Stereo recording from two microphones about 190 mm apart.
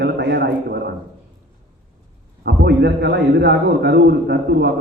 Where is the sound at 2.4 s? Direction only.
60° right (ahead or behind).